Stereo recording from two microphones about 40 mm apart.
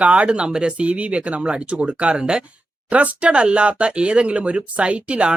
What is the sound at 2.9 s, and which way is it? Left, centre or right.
Speech, right.